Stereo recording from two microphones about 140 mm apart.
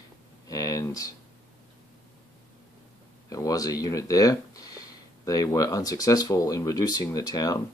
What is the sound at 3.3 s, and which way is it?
Speech, 25° left (ahead or behind).